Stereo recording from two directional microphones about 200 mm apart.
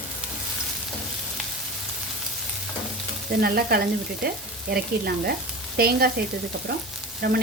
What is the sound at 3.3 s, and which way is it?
Speech, 50° right (ahead or behind).